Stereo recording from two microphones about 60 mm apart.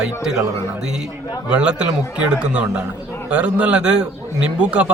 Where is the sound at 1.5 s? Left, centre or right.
Centre.